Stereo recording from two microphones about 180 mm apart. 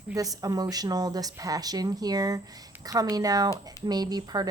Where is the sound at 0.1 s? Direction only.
20° right (ahead or behind).